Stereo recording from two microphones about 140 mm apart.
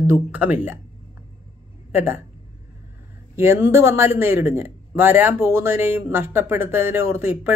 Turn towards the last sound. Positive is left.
turn(degrees=-15)  # may be behind; listen again after turning